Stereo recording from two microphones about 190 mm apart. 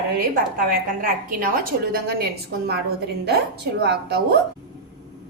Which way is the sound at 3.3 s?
60° right (ahead or behind).